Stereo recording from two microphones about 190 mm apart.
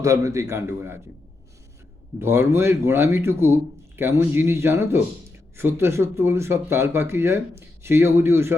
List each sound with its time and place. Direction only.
0.0 s speech: 15° right (ahead or behind)
2.1 s speech: 15° right (ahead or behind)